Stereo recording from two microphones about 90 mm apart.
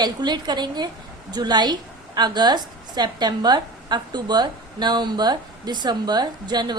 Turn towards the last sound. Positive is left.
turn(degrees=-50)  # may be behind; listen again after turning